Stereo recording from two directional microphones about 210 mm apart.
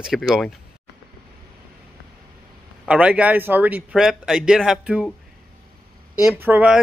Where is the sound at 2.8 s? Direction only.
5° right (ahead or behind).